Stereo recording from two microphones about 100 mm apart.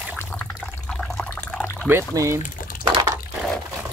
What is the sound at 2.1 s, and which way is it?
Speech, 30° right (ahead or behind).